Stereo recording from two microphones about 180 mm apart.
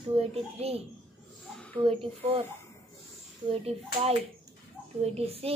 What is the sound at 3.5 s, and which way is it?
Speech, 35° right (ahead or behind).